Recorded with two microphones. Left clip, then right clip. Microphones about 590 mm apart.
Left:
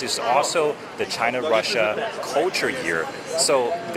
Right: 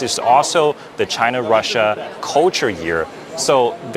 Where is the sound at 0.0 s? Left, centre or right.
Right.